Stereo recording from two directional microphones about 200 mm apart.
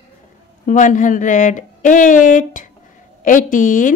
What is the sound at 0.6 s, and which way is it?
A woman's voice, 40° left (ahead or behind).